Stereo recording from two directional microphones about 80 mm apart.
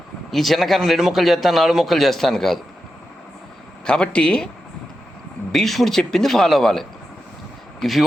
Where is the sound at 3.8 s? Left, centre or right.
Centre.